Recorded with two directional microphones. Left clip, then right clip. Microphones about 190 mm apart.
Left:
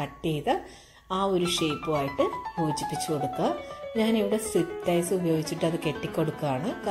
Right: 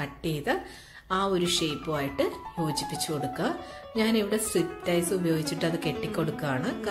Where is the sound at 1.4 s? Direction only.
20° right (ahead or behind).